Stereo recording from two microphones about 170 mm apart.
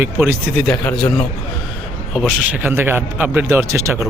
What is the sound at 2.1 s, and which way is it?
A man's voice, 5° right (ahead or behind).